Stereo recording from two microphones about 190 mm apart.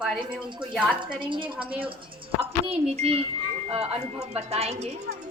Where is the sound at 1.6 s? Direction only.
5° right (ahead or behind).